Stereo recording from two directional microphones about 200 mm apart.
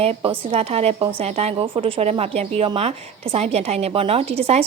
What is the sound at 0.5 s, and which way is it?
Speech, 30° right (ahead or behind).